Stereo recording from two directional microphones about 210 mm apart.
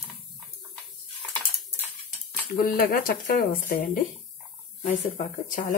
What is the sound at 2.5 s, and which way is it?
Speech, 45° left (ahead or behind).